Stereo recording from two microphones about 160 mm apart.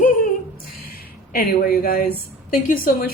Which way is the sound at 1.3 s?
65° left (ahead or behind).